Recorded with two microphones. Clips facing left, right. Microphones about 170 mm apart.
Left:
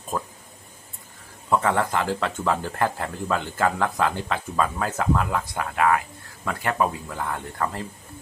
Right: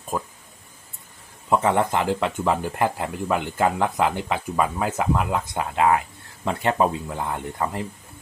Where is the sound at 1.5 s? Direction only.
20° right (ahead or behind).